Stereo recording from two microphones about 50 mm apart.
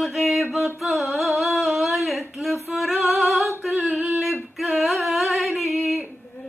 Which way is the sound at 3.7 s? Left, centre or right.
Right.